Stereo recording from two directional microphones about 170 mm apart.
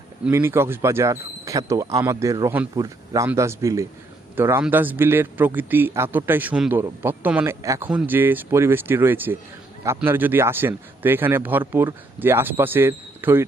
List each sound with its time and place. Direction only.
0.3 s a man's voice: 15° right (ahead or behind)